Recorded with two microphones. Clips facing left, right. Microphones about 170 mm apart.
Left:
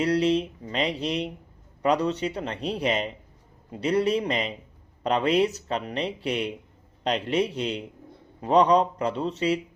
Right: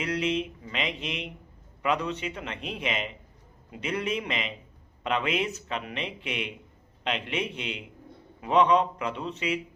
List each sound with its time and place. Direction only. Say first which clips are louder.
0.0 s speech: left 6 dB; 35° left (ahead or behind)